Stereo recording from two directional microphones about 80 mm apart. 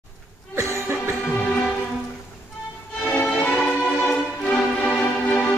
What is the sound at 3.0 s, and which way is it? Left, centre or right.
Music, centre.